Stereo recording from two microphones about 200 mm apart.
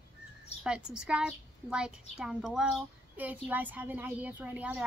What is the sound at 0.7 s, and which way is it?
A woman's voice, 5° right (ahead or behind).